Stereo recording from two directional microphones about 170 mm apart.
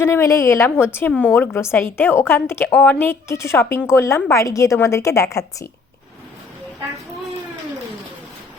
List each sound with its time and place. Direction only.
0.0 s a woman's voice: 15° left (ahead or behind)